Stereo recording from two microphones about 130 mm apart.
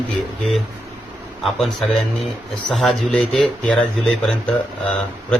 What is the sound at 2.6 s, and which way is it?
Speech, centre (ahead or behind).